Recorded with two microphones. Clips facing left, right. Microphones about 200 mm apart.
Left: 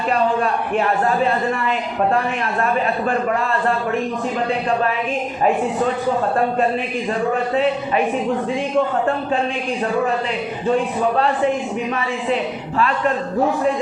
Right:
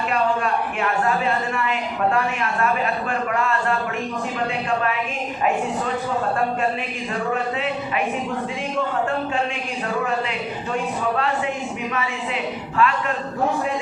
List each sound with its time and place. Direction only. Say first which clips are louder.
0.1 s a man's voice: left 4 dB; 35° left (ahead or behind)
7.5 s a man's voice: left 7 dB; 35° left (ahead or behind)
11.9 s a man's voice: left 5 dB; 35° left (ahead or behind)